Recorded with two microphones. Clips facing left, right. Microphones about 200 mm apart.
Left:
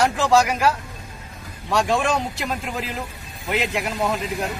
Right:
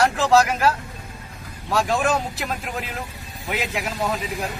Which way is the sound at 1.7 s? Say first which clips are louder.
Even; centre (ahead or behind).